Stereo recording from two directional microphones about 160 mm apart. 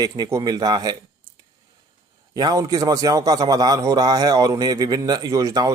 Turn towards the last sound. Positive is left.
turn(degrees=-20)  # may be behind; listen again after turning